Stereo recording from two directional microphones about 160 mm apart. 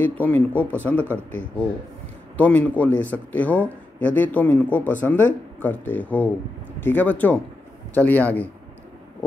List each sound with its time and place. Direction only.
0.0 s speech: 10° left (ahead or behind)